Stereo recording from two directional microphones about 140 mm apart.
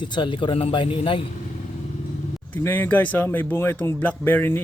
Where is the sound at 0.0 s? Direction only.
35° left (ahead or behind).